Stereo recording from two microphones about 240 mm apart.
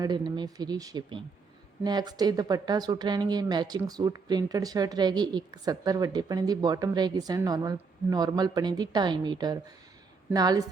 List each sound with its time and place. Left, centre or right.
0.0 s speech: centre